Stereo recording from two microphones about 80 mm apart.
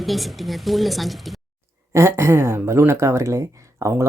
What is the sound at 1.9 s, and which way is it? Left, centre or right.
Speech, right.